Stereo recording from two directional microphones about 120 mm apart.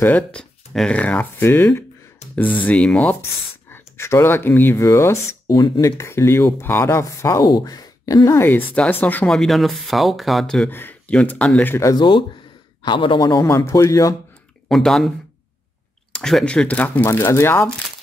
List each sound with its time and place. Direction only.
0.0 s speech: 10° left (ahead or behind)
3.7 s speech: 20° left (ahead or behind)
9.3 s speech: centre (ahead or behind)
10.7 s speech: 15° left (ahead or behind)
11.9 s speech: 45° left (ahead or behind)
13.7 s speech: 25° left (ahead or behind)
14.7 s speech: centre (ahead or behind)
16.2 s speech: 5° left (ahead or behind); by 17.6 s 20° left (ahead or behind)